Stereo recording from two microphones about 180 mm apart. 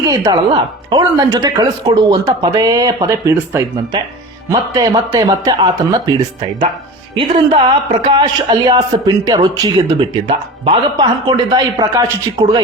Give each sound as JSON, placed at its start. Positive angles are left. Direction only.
{"t": 0.0, "sound": "speech", "side_deg": -20}
{"t": 4.7, "sound": "a woman's voice", "side_deg": -20}
{"t": 8.1, "sound": "speech", "side_deg": -25}